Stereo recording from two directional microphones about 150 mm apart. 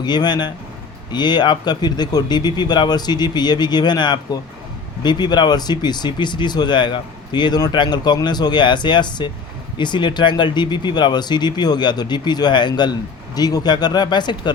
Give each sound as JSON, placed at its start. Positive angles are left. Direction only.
{"t": 0.0, "sound": "speech", "side_deg": 30}